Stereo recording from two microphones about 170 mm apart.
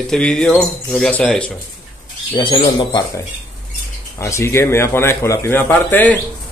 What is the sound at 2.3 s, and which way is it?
A man's voice, 25° left (ahead or behind).